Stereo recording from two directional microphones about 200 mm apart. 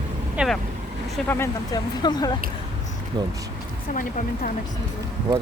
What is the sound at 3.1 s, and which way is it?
Speech, 20° right (ahead or behind).